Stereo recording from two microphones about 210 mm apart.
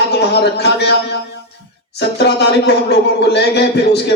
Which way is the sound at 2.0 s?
55° left (ahead or behind).